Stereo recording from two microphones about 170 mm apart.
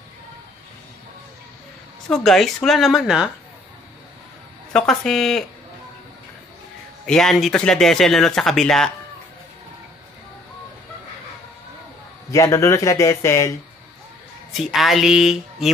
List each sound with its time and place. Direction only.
2.0 s speech: centre (ahead or behind)
4.7 s speech: 5° left (ahead or behind)
7.1 s speech: 5° left (ahead or behind)
12.3 s speech: 15° left (ahead or behind)
14.6 s speech: centre (ahead or behind)